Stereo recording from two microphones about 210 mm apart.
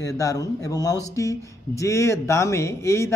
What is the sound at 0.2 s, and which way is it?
Speech, 15° left (ahead or behind).